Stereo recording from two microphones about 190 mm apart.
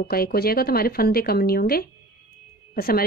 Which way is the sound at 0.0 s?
55° left (ahead or behind).